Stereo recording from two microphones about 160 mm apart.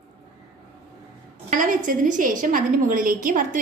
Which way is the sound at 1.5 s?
55° right (ahead or behind).